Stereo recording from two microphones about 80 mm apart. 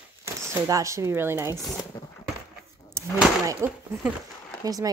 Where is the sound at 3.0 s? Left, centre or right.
Right.